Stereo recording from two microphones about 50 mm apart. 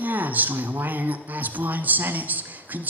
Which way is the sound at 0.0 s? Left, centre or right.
Right.